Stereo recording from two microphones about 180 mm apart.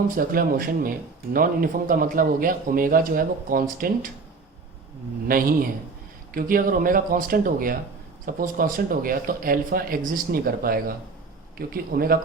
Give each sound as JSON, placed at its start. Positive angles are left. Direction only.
{"t": 0.2, "sound": "speech", "side_deg": -55}
{"t": 5.3, "sound": "speech", "side_deg": -50}